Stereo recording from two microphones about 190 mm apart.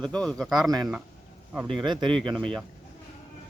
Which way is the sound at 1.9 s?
25° right (ahead or behind).